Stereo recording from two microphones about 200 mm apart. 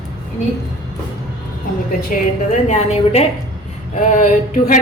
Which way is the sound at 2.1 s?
40° left (ahead or behind).